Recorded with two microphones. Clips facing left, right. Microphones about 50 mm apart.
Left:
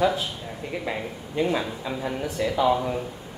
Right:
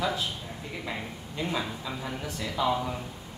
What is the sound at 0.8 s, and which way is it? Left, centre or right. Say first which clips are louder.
Speech: left 5 dB; left.